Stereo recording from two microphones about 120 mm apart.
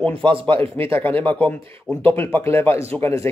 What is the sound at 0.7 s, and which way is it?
Speech, 20° left (ahead or behind).